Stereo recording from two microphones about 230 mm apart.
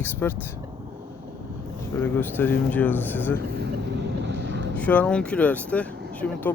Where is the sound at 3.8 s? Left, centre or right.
Right.